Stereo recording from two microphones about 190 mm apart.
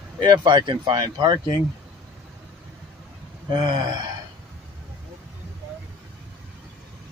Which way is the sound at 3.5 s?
25° right (ahead or behind).